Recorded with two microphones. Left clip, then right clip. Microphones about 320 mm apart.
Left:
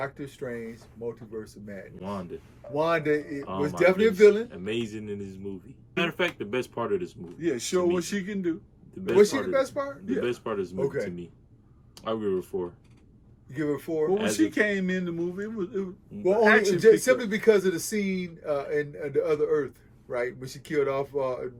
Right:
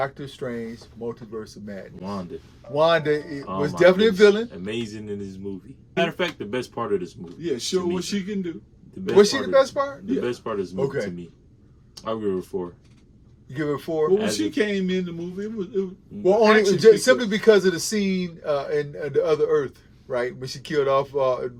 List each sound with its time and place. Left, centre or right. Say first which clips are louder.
0.0 s speech: right 6 dB; centre
2.0 s speech: right 2 dB; centre
2.7 s speech: right 6 dB; centre
4.5 s speech: right 1 dB; centre
9.0 s speech: right 4 dB; centre
10.8 s speech: right 4 dB; centre
11.9 s speech: right 2 dB; centre
13.5 s speech: right 3 dB; centre
14.2 s speech: right 1 dB; centre
16.2 s speech: right 4 dB; centre